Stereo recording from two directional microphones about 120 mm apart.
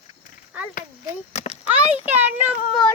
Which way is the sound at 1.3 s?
65° left (ahead or behind).